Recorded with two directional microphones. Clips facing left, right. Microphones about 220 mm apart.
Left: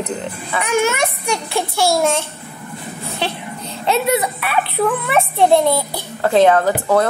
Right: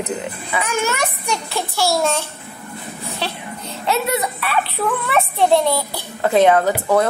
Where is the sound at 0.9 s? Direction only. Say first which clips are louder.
Left 3 dB; 10° left (ahead or behind).